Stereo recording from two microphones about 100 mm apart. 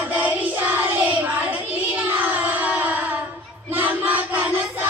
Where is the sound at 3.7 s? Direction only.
20° right (ahead or behind).